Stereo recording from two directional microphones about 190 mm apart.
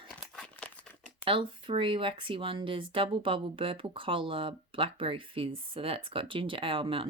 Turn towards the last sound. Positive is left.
turn(degrees=-25)  # may be behind; listen again after turning